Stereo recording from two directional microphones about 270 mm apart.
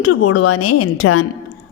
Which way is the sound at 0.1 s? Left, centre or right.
Left.